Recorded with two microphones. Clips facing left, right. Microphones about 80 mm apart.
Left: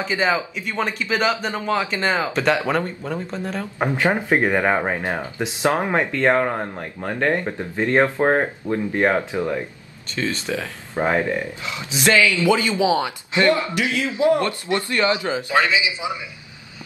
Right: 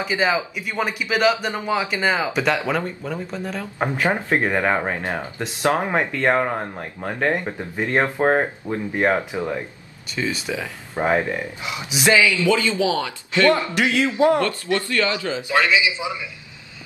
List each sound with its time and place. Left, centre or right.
0.0 s a man's voice: centre
5.9 s a man's voice: centre
11.0 s speech: centre
11.3 s a man's voice: centre
12.4 s a man's voice: left